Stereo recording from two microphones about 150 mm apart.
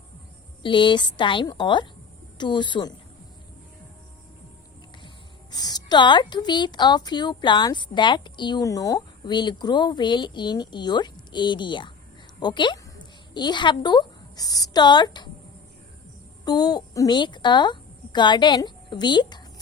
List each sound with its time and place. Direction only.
0.6 s a woman's voice: 30° left (ahead or behind)
5.0 s a woman's voice: 25° left (ahead or behind)
16.4 s a woman's voice: 25° left (ahead or behind)